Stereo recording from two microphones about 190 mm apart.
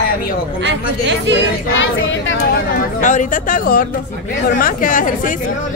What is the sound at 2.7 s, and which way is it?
Speech, 40° left (ahead or behind).